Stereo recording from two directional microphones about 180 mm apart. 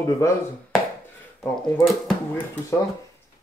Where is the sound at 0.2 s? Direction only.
15° left (ahead or behind).